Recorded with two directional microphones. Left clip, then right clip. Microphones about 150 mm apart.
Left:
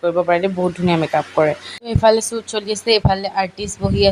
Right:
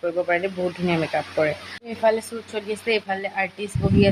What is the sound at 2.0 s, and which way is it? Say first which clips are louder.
Speech: left 7 dB; 45° left (ahead or behind).